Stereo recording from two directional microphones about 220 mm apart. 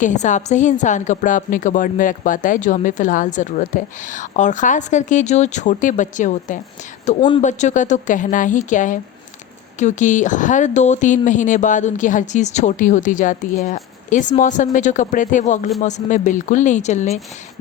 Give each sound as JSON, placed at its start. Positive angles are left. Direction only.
{"t": 0.0, "sound": "a woman's voice", "side_deg": 35}
{"t": 7.2, "sound": "speech", "side_deg": 20}
{"t": 7.4, "sound": "a woman's voice", "side_deg": 35}